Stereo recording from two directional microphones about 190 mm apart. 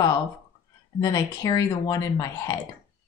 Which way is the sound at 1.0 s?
20° left (ahead or behind).